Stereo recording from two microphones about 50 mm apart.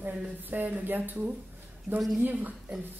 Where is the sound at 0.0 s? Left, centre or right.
Right.